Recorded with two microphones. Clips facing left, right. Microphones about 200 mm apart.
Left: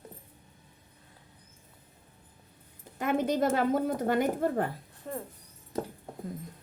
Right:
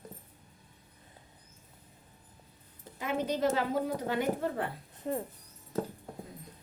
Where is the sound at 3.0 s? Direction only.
50° left (ahead or behind).